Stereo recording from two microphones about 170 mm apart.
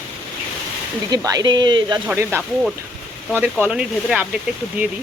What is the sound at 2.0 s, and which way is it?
Speech, 15° right (ahead or behind).